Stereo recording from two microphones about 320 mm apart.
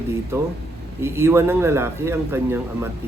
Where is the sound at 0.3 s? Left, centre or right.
Centre.